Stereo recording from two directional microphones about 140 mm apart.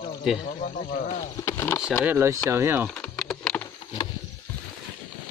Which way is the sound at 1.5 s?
20° left (ahead or behind).